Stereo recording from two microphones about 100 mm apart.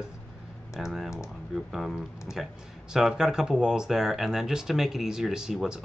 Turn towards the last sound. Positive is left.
turn(degrees=-5)  # may be behind; listen again after turning